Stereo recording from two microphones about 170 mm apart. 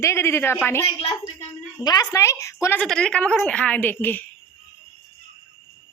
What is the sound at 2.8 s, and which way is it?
A woman's voice, 5° left (ahead or behind).